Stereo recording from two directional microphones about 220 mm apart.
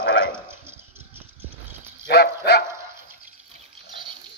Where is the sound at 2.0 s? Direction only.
45° left (ahead or behind).